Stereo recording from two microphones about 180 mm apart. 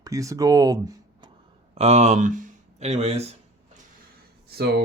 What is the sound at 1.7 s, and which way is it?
Speech, 35° right (ahead or behind).